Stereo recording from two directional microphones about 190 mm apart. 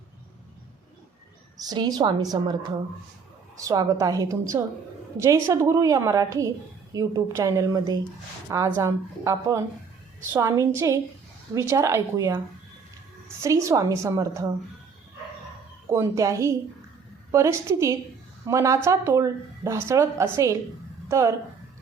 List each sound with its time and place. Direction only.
1.6 s a woman's voice: 20° right (ahead or behind)
3.6 s a woman's voice: 15° right (ahead or behind)
13.4 s a woman's voice: 15° right (ahead or behind)
15.9 s a woman's voice: 15° right (ahead or behind)